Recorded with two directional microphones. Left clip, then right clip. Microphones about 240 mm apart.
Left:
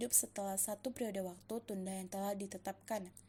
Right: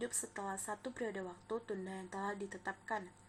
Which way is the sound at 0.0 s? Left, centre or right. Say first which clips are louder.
Left 2 dB; left.